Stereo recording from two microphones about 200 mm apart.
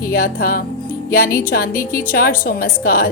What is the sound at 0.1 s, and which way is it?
A woman's voice, 50° left (ahead or behind).